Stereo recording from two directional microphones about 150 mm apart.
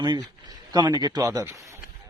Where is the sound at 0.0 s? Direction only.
25° right (ahead or behind).